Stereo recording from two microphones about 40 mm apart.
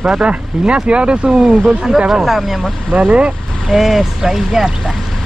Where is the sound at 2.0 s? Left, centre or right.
Centre.